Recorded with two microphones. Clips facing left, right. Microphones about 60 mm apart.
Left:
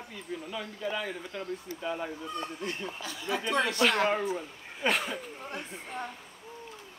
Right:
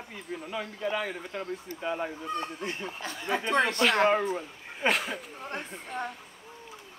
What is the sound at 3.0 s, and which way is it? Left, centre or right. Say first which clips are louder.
Speech: right 4 dB; right.